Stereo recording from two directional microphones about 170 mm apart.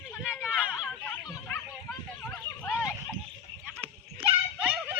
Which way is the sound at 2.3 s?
10° left (ahead or behind).